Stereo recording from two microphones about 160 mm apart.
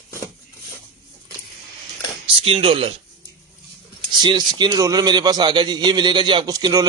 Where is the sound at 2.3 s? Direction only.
35° right (ahead or behind).